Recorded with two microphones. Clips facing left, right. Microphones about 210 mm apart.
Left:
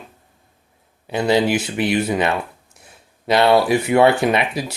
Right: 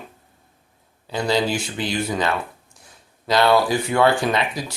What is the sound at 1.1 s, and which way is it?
Speech, 20° left (ahead or behind).